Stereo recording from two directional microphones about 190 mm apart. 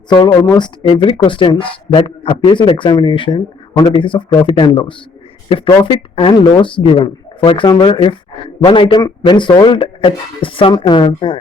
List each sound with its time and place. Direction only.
0.1 s speech: 25° left (ahead or behind)